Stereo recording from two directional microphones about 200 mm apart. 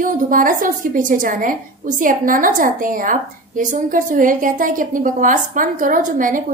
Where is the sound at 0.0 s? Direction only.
45° right (ahead or behind).